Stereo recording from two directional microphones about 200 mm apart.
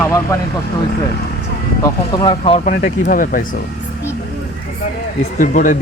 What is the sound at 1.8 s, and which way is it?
Speech, 20° left (ahead or behind).